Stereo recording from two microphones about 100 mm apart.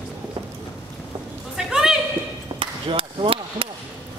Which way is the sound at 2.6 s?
60° right (ahead or behind).